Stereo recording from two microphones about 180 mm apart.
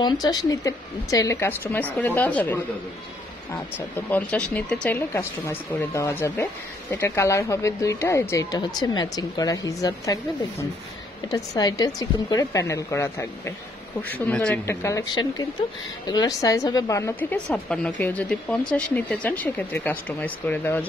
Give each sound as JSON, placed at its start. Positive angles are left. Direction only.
{"t": 0.0, "sound": "speech", "side_deg": 20}
{"t": 11.2, "sound": "a woman's voice", "side_deg": 20}